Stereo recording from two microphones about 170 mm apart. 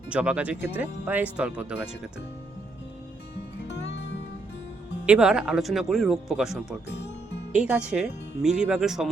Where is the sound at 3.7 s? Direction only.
90° left.